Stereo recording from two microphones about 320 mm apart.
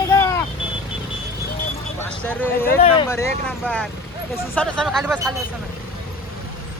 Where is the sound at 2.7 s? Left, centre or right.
Centre.